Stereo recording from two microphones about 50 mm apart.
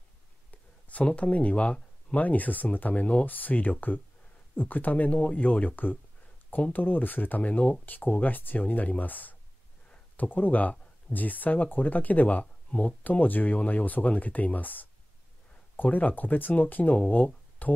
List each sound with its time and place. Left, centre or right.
0.5 s a sound: left
1.0 s speech: left
2.2 s speech: left